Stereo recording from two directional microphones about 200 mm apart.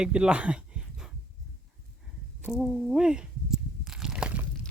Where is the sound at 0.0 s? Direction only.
5° right (ahead or behind).